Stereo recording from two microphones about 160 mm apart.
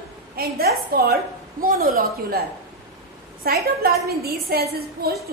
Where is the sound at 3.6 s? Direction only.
70° right (ahead or behind).